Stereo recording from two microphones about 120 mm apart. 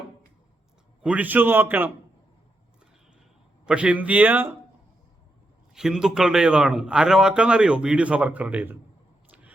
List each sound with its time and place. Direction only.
1.0 s a man's voice: 10° right (ahead or behind)
3.7 s a man's voice: 10° right (ahead or behind)
5.7 s a man's voice: 5° right (ahead or behind)